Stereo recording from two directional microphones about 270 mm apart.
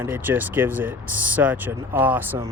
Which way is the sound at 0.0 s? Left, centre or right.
Centre.